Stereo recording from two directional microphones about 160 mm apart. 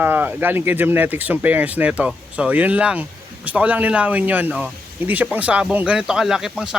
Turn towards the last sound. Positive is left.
turn(degrees=-5)  # may be behind; listen again after turning